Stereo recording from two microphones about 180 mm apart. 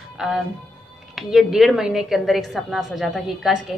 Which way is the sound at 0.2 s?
Centre (ahead or behind).